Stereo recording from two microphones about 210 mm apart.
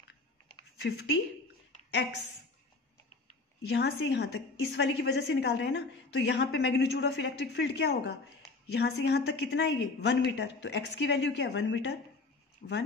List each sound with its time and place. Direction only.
0.8 s a woman's voice: 55° left (ahead or behind)
3.7 s a woman's voice: 55° left (ahead or behind)
12.6 s a woman's voice: 45° left (ahead or behind)